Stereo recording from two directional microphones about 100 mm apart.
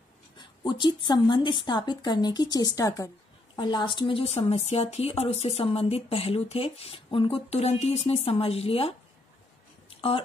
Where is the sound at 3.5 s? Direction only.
50° left (ahead or behind).